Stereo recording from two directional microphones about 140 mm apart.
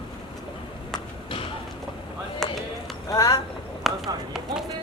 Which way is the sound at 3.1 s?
25° left (ahead or behind).